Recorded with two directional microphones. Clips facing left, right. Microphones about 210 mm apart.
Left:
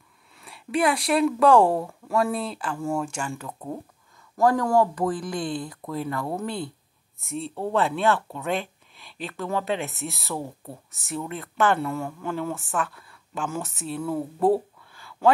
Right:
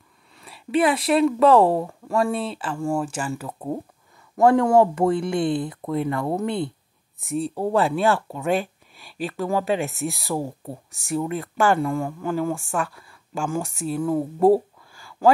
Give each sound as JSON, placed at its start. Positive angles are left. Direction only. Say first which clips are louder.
{"t": 0.4, "sound": "speech", "louder": "right 3 dB", "side_deg": 0}
{"t": 4.4, "sound": "speech", "louder": "right 4 dB", "side_deg": -25}
{"t": 7.2, "sound": "speech", "louder": "right 6 dB", "side_deg": 0}
{"t": 10.4, "sound": "speech", "louder": "right 5 dB", "side_deg": -30}
{"t": 10.9, "sound": "speech", "louder": "right 7 dB", "side_deg": 0}
{"t": 15.0, "sound": "a sound", "louder": "right 2 dB", "side_deg": 0}